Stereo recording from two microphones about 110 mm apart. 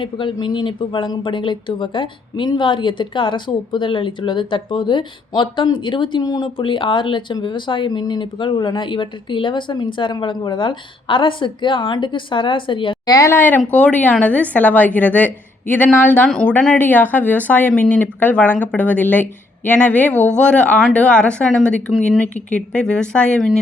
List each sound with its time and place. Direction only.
0.0 s speech: 50° left (ahead or behind)
13.1 s speech: 20° left (ahead or behind)